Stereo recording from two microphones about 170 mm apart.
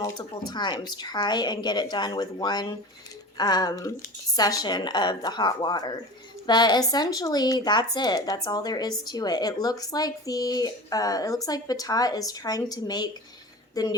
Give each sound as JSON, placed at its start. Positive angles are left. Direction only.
{"t": 0.0, "sound": "speech", "side_deg": 25}